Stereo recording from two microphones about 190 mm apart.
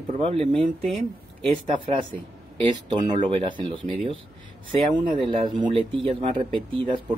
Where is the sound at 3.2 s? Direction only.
25° right (ahead or behind).